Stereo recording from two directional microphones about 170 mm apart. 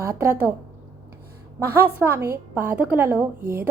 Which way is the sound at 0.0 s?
15° right (ahead or behind).